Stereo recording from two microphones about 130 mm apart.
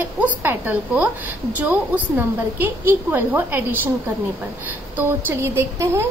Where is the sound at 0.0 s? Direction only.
15° right (ahead or behind).